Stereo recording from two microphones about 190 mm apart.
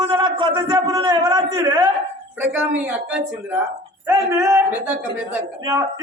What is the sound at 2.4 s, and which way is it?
Speech, 10° right (ahead or behind).